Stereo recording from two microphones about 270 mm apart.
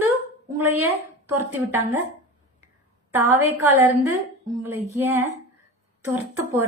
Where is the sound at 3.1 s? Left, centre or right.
Centre.